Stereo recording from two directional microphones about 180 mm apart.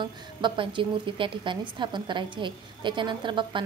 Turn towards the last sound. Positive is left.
turn(degrees=-25)  # may be behind; listen again after turning